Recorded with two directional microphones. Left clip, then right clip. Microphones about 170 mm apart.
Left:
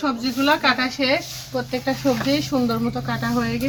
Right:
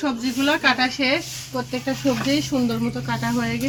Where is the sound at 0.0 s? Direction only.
5° left (ahead or behind).